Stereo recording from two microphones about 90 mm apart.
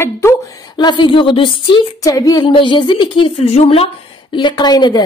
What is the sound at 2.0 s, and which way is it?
Speech, 40° left (ahead or behind).